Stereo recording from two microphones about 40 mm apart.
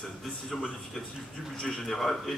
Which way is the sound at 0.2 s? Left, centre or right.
Centre.